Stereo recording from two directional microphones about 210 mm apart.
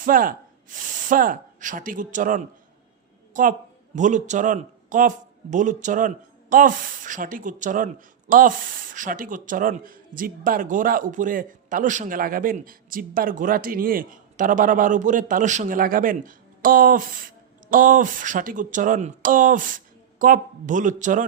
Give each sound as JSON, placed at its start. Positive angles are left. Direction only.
{"t": 0.0, "sound": "a man's voice", "side_deg": -40}